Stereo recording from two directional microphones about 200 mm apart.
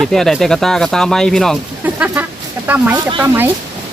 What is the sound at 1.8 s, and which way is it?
Speech, 10° right (ahead or behind).